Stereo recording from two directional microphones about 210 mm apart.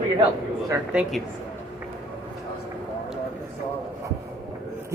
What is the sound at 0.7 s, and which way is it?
Speech, 5° right (ahead or behind).